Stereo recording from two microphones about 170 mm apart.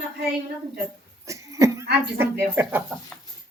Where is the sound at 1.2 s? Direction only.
20° right (ahead or behind).